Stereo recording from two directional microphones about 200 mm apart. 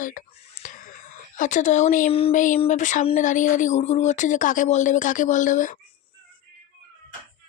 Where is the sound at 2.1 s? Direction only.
30° left (ahead or behind).